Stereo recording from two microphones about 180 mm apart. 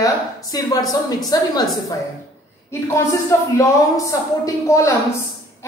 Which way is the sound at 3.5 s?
15° left (ahead or behind).